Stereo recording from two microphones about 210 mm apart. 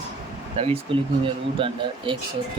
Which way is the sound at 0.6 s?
25° right (ahead or behind).